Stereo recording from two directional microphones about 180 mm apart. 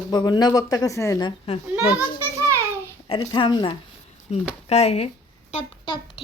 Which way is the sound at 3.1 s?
25° left (ahead or behind).